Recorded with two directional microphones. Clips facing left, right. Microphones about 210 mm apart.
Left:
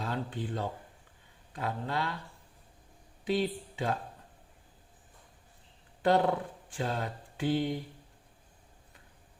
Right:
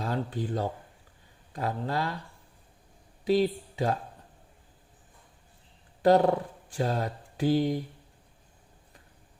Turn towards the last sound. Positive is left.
turn(degrees=-40)  # may be behind; listen again after turning